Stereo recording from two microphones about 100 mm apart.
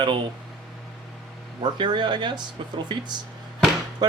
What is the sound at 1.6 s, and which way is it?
Speech, 50° right (ahead or behind).